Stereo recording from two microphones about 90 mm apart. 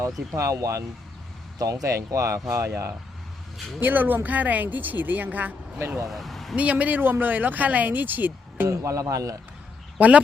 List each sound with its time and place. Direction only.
0.3 s speech: 35° right (ahead or behind)
3.8 s speech: 20° right (ahead or behind)
6.1 s speech: centre (ahead or behind)
6.6 s speech: 15° right (ahead or behind); by 9.3 s 35° right (ahead or behind)